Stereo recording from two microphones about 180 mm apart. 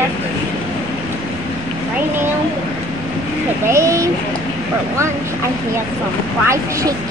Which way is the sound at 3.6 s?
15° right (ahead or behind).